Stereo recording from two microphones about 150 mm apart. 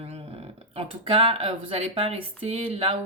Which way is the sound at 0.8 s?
40° right (ahead or behind).